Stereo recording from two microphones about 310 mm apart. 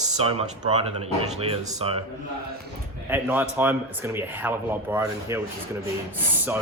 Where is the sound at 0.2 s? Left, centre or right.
Centre.